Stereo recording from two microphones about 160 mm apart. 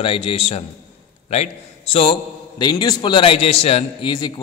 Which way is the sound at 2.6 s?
25° left (ahead or behind).